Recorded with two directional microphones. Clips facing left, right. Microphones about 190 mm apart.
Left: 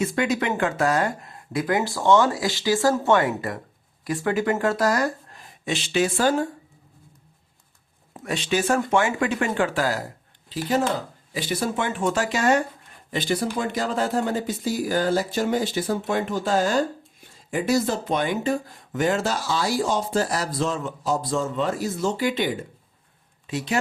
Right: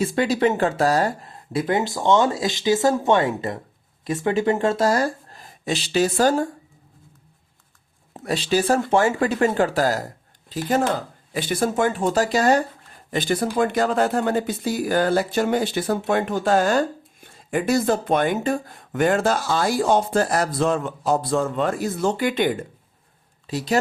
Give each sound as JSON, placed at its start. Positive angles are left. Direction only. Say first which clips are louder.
{"t": 0.0, "sound": "speech", "louder": "right 4 dB", "side_deg": -30}
{"t": 8.1, "sound": "speech", "louder": "right 3 dB", "side_deg": -35}
{"t": 13.1, "sound": "speech", "louder": "right 2 dB", "side_deg": -50}
{"t": 23.5, "sound": "speech", "louder": "right 2 dB", "side_deg": -35}